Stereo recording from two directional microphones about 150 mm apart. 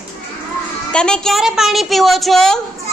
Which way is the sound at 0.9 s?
5° left (ahead or behind).